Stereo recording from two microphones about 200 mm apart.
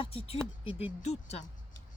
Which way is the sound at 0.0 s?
25° left (ahead or behind).